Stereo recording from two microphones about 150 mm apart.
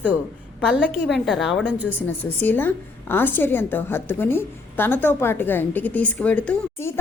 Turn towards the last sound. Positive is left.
turn(degrees=10)  # may be behind; listen again after turning